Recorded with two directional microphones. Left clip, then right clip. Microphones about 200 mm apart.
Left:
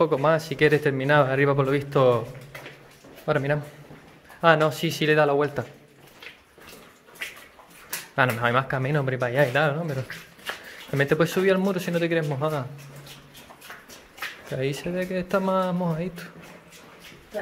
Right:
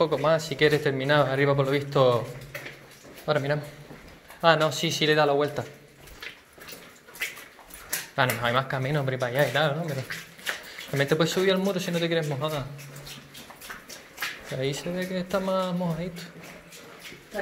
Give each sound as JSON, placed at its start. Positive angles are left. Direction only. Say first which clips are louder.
{"t": 0.0, "sound": "a man's voice", "louder": "left 2 dB", "side_deg": 35}
{"t": 3.3, "sound": "a man's voice", "louder": "left 1 dB", "side_deg": 35}
{"t": 8.2, "sound": "a man's voice", "louder": "left 3 dB", "side_deg": 30}
{"t": 11.0, "sound": "a man's voice", "louder": "left 2 dB", "side_deg": 35}
{"t": 14.5, "sound": "a man's voice", "louder": "left 4 dB", "side_deg": 35}